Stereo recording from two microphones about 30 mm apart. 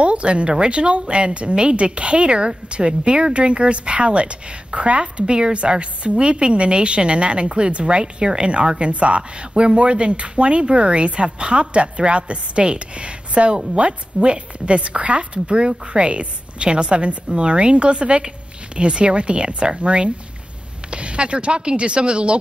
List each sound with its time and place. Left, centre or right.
0.0 s speech: right
5.2 s speech: right
9.5 s speech: right